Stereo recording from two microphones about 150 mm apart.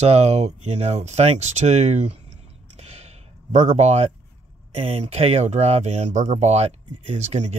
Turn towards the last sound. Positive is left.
turn(degrees=-50)  # may be behind; listen again after turning